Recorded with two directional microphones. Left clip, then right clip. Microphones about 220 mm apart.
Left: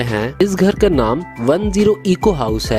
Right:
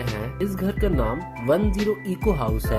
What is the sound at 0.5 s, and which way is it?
Speech, 45° left (ahead or behind).